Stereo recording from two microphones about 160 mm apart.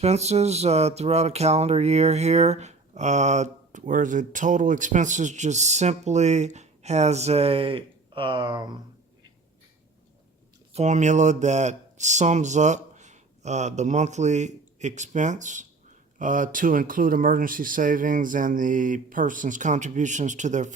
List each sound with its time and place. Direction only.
0.0 s speech: 45° right (ahead or behind); by 8.8 s 25° right (ahead or behind)
10.8 s speech: 50° right (ahead or behind)